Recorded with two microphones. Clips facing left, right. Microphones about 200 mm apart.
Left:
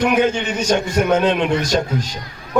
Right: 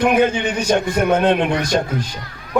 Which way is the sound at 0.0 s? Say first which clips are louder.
Right 1 dB; 55° right (ahead or behind).